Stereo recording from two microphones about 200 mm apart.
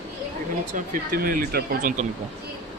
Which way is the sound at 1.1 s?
45° right (ahead or behind).